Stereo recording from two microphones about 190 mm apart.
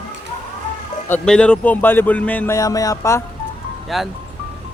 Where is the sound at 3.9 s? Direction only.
Centre (ahead or behind).